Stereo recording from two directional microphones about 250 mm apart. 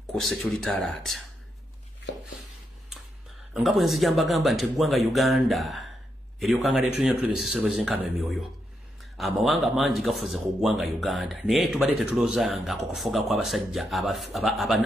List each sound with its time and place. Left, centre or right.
0.0 s speech: centre
3.5 s speech: centre